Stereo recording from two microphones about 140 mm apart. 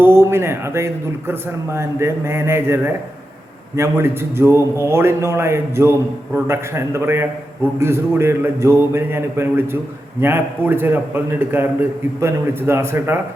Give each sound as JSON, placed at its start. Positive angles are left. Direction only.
{"t": 0.0, "sound": "a man's voice", "side_deg": -20}